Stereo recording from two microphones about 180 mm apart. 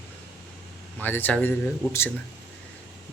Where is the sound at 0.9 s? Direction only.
10° left (ahead or behind).